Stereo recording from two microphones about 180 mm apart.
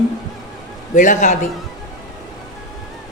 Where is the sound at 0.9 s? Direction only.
45° left (ahead or behind).